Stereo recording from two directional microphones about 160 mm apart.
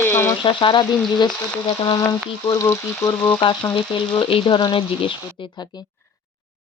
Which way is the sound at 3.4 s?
30° left (ahead or behind).